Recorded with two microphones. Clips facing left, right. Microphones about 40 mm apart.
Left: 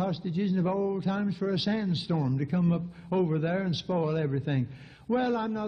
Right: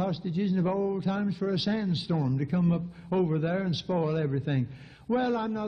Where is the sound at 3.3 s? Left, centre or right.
Centre.